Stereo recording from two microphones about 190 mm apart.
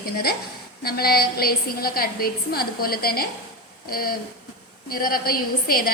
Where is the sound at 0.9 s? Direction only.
55° left (ahead or behind).